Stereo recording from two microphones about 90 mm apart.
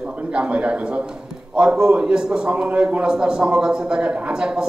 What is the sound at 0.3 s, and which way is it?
A man's voice, 10° right (ahead or behind).